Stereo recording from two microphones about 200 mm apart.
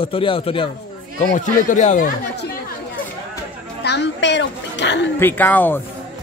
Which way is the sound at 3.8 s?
60° left (ahead or behind).